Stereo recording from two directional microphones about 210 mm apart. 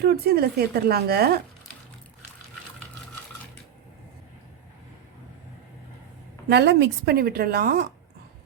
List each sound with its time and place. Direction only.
0.0 s speech: 45° right (ahead or behind)
6.5 s speech: 55° right (ahead or behind)